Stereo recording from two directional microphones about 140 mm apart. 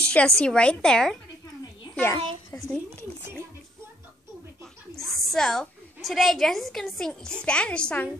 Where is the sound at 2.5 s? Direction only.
25° left (ahead or behind).